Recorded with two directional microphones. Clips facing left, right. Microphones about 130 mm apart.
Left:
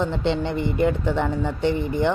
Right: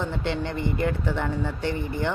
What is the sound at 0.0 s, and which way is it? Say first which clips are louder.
Speech: left 5 dB; 20° left (ahead or behind).